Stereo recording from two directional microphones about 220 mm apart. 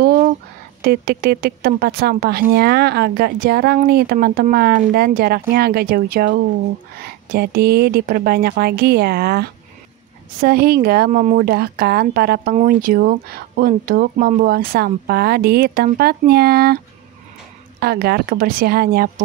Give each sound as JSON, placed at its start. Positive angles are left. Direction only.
{"t": 0.8, "sound": "a woman's voice", "side_deg": -45}